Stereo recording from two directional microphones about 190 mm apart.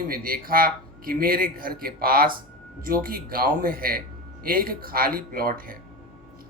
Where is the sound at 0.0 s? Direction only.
50° right (ahead or behind).